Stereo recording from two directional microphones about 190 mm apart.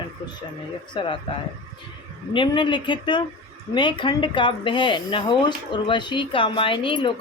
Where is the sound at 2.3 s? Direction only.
25° left (ahead or behind).